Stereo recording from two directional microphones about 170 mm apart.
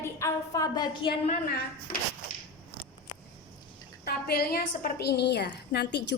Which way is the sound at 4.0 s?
65° left (ahead or behind).